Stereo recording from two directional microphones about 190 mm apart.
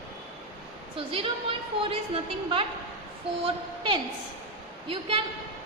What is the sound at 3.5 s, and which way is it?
A woman's voice, 25° right (ahead or behind).